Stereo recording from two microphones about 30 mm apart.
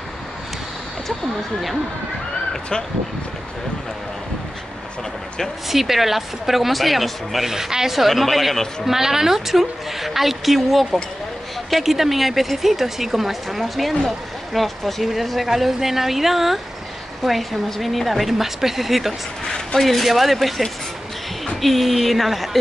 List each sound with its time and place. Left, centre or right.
5.7 s a woman's voice: centre
7.5 s a woman's voice: centre
7.9 s speech: centre
8.9 s a woman's voice: centre
15.4 s a woman's voice: centre
19.8 s speech: centre